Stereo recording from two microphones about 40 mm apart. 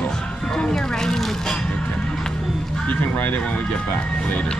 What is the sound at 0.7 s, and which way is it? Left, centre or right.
Speech, centre.